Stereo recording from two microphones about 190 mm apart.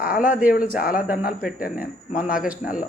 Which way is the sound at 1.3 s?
5° right (ahead or behind).